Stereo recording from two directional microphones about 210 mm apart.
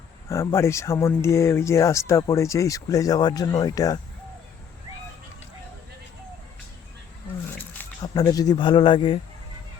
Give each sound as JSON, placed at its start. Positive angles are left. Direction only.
{"t": 0.3, "sound": "speech", "side_deg": 10}
{"t": 7.8, "sound": "speech", "side_deg": 20}